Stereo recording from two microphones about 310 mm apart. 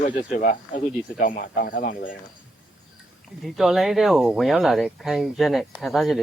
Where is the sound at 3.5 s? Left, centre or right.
Centre.